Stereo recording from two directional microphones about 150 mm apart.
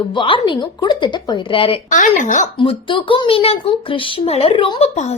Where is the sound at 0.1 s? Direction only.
35° left (ahead or behind).